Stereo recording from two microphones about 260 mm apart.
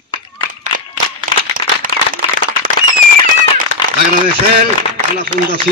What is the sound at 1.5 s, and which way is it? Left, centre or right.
Clapping, right.